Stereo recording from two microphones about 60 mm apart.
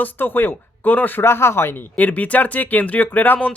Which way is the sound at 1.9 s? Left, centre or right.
Left.